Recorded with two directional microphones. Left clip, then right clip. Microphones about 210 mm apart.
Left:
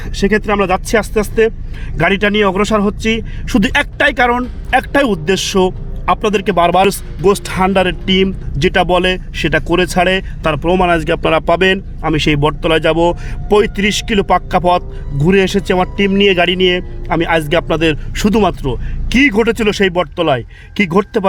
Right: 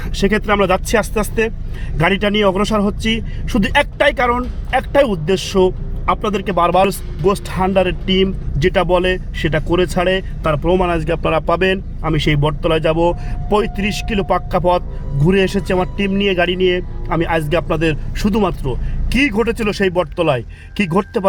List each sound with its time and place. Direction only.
0.0 s speech: 20° left (ahead or behind)
2.0 s a man's voice: 35° left (ahead or behind)